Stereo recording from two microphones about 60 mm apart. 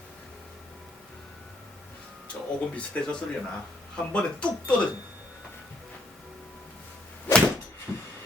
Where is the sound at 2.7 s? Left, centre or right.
Centre.